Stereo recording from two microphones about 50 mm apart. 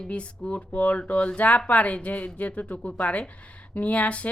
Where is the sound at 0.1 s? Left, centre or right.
Left.